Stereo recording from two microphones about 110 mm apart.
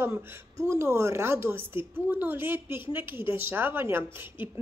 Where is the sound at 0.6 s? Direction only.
25° right (ahead or behind).